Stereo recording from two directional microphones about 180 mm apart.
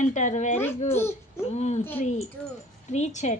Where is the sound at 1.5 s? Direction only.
40° left (ahead or behind).